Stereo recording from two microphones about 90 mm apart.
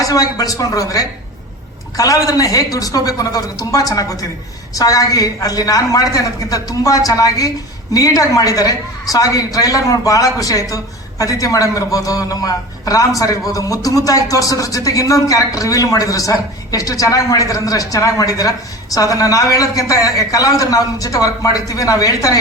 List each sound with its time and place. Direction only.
0.1 s speech: 40° left (ahead or behind)